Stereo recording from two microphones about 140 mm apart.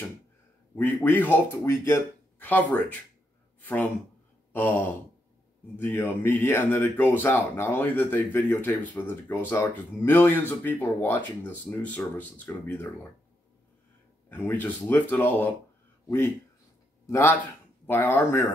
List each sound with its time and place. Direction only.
0.7 s speech: 15° left (ahead or behind)
4.5 s a sound: 15° left (ahead or behind)
5.8 s speech: 15° left (ahead or behind)
14.3 s speech: 15° left (ahead or behind)
17.0 s a man's voice: 20° left (ahead or behind)